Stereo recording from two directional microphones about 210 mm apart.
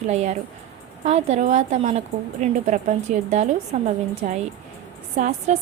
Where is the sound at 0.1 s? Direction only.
30° right (ahead or behind).